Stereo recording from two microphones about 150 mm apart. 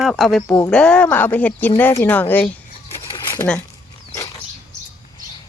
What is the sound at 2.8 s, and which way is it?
Bird, 40° left (ahead or behind).